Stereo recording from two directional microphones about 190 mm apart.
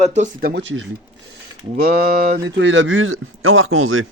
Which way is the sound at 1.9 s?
50° right (ahead or behind).